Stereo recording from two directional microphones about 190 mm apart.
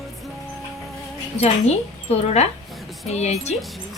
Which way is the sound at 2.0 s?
35° left (ahead or behind).